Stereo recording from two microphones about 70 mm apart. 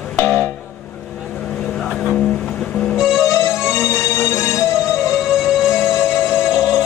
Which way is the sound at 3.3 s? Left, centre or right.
Left.